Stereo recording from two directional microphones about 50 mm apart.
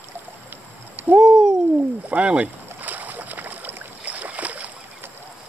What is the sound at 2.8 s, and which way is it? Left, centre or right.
Boat, right.